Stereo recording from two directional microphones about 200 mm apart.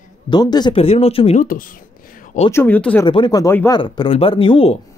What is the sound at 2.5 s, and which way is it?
Speech, 10° left (ahead or behind).